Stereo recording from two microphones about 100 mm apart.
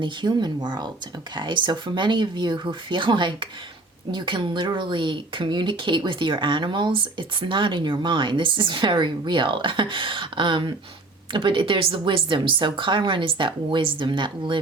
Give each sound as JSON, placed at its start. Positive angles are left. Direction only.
{"t": 0.0, "sound": "a woman's voice", "side_deg": -50}